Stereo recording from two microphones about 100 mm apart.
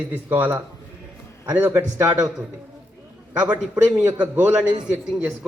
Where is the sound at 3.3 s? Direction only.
20° right (ahead or behind).